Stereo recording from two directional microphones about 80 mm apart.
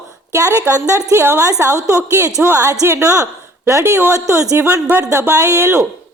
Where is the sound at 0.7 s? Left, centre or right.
Right.